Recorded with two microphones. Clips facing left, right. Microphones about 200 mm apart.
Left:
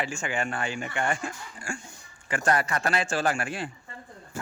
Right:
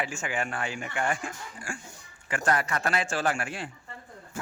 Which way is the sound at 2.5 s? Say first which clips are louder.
Left 2 dB; 35° left (ahead or behind).